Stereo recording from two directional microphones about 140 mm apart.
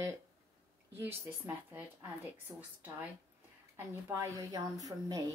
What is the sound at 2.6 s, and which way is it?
Speech, 10° right (ahead or behind).